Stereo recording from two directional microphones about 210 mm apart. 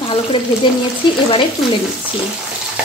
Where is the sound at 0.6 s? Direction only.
20° left (ahead or behind).